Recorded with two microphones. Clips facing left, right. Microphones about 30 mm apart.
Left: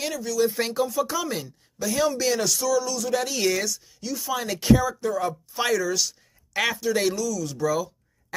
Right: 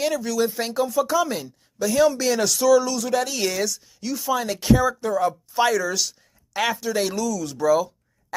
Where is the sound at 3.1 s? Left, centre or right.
Centre.